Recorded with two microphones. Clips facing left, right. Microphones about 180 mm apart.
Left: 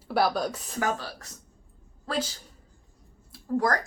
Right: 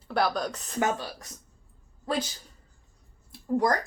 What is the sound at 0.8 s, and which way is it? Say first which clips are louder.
Speech: right 1 dB; 20° right (ahead or behind).